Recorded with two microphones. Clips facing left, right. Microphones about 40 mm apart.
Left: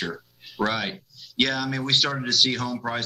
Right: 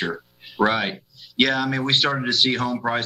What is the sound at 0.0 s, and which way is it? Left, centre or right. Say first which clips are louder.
Speech: right 4 dB; centre.